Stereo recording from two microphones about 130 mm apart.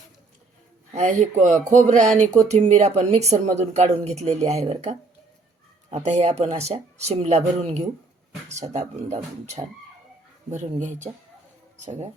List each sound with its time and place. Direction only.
0.9 s speech: 65° right (ahead or behind)
10.5 s speech: 70° right (ahead or behind)